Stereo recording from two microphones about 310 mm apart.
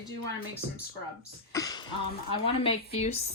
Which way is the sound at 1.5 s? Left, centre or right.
Centre.